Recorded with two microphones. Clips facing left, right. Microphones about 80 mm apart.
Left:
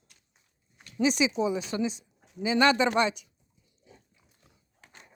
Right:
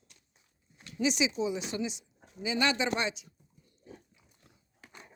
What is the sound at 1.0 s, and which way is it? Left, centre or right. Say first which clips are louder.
Speech: left 4 dB; left.